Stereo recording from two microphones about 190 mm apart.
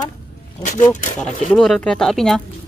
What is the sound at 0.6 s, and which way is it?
Speech, 40° left (ahead or behind).